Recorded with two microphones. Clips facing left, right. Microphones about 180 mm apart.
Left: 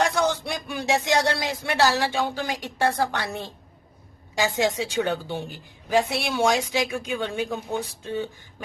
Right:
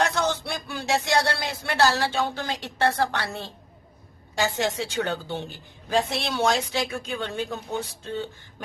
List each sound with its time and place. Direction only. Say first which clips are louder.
0.0 s music: left 2 dB; 10° left (ahead or behind)
4.4 s a woman's voice: left 2 dB; 15° left (ahead or behind)